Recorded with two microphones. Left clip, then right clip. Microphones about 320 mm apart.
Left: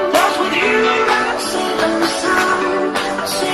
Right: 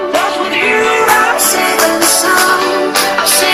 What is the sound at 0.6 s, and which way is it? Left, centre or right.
Music, centre.